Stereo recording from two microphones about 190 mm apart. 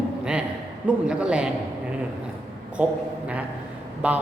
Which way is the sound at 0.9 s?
5° right (ahead or behind).